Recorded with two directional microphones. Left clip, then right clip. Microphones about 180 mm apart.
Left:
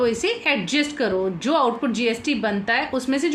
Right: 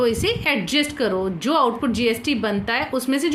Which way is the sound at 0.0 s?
30° right (ahead or behind).